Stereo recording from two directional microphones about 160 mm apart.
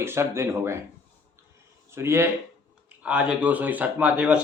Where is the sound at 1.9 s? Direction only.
15° right (ahead or behind).